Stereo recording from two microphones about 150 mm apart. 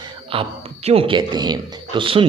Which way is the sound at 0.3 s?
35° right (ahead or behind).